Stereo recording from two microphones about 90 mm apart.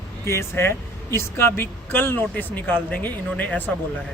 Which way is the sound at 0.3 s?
30° left (ahead or behind).